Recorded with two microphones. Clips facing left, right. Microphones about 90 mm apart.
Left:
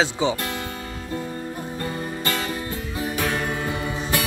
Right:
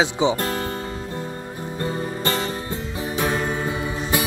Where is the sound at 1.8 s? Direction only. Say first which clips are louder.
Right 5 dB; 35° right (ahead or behind).